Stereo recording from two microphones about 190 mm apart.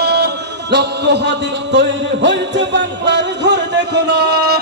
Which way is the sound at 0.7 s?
65° right (ahead or behind).